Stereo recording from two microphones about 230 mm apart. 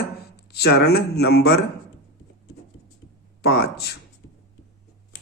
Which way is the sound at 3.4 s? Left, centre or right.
Left.